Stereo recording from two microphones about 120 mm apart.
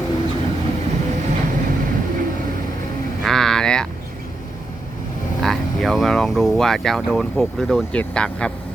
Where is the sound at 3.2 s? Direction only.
5° left (ahead or behind).